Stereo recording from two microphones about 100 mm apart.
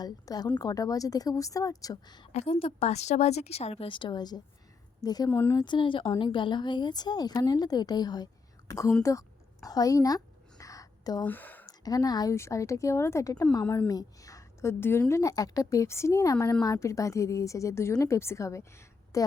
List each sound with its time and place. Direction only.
0.0 s a woman's voice: 40° left (ahead or behind)
2.3 s a woman's voice: 85° left; by 5.3 s 40° left (ahead or behind)
5.3 s speech: 25° left (ahead or behind)
5.5 s a woman's voice: 50° left (ahead or behind); by 8.9 s 35° left (ahead or behind)
9.6 s a sound: 35° left (ahead or behind)
11.2 s speech: 20° left (ahead or behind)
11.6 s a woman's voice: 40° left (ahead or behind)